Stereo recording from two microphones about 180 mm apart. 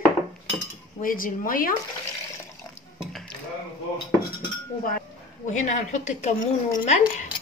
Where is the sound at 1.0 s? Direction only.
50° left (ahead or behind).